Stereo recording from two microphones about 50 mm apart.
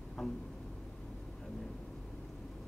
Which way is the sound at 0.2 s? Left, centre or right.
Centre.